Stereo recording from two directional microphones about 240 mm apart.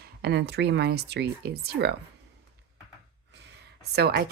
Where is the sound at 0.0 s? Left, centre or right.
Right.